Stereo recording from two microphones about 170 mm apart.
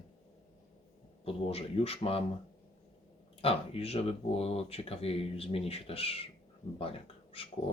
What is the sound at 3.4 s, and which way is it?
Speech, 35° left (ahead or behind).